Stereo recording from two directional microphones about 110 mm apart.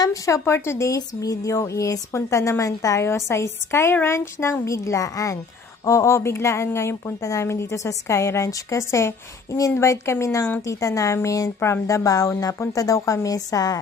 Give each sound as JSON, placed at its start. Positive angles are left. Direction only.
{"t": 0.0, "sound": "speech", "side_deg": 30}